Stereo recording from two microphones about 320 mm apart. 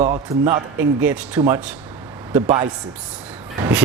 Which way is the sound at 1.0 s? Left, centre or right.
Centre.